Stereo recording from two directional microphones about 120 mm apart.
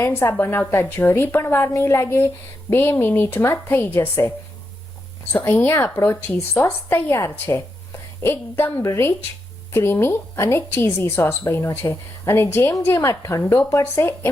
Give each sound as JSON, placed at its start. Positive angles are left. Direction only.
{"t": 0.0, "sound": "a woman's voice", "side_deg": 20}
{"t": 5.3, "sound": "a woman's voice", "side_deg": 15}